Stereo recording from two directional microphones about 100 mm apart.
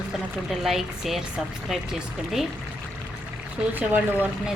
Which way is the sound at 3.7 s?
20° right (ahead or behind).